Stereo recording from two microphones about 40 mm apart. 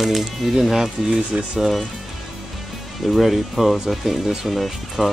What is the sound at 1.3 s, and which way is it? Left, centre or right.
Speech, right.